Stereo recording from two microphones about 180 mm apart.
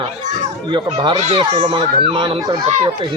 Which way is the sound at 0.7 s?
25° right (ahead or behind).